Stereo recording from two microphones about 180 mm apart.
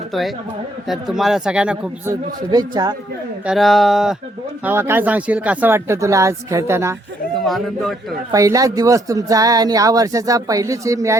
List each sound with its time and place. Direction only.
0.1 s speech: centre (ahead or behind)
2.5 s speech: 20° right (ahead or behind)
3.4 s speech: centre (ahead or behind)
4.6 s speech: 15° right (ahead or behind)
7.3 s a man's voice: centre (ahead or behind)
8.3 s speech: 20° right (ahead or behind)